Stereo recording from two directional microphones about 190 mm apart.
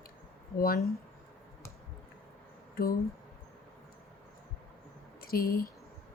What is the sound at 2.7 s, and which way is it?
Speech, 50° left (ahead or behind).